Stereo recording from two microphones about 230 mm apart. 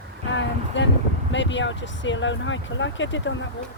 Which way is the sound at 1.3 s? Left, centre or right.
Left.